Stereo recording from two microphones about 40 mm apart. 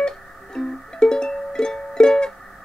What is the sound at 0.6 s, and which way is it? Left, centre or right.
Music, centre.